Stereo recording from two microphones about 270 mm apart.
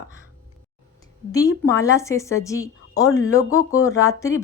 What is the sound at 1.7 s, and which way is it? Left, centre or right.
A woman's voice, centre.